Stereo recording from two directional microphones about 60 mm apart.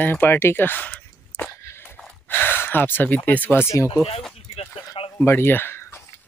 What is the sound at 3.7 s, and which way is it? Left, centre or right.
Speech, left.